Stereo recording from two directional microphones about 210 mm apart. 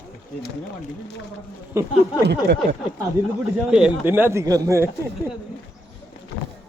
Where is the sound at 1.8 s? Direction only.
10° right (ahead or behind).